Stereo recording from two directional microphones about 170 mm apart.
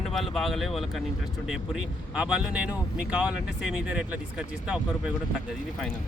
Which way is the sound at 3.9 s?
5° right (ahead or behind).